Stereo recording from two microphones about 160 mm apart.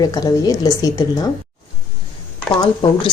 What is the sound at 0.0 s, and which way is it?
A woman's voice, 25° left (ahead or behind).